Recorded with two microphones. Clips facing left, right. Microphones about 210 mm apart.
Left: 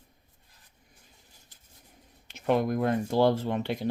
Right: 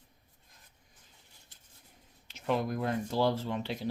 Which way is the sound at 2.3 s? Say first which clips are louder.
Left 6 dB; 55° left (ahead or behind).